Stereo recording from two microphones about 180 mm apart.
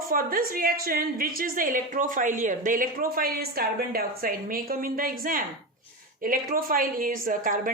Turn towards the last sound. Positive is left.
turn(degrees=-50)  # may be behind; listen again after turning